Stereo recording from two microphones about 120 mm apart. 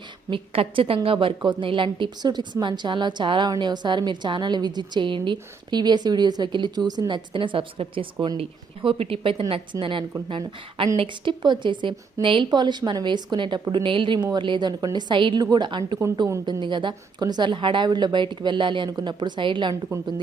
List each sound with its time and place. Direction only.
0.3 s a woman's voice: 50° right (ahead or behind)